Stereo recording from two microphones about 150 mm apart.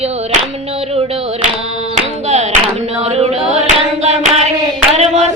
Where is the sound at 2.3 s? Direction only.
50° right (ahead or behind).